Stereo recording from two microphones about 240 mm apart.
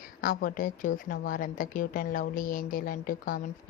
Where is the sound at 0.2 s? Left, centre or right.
Left.